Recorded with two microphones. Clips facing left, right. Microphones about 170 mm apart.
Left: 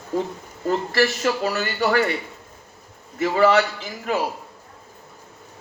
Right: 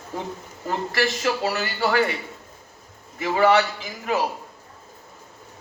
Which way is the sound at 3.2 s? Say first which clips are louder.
Left 1 dB; 40° left (ahead or behind).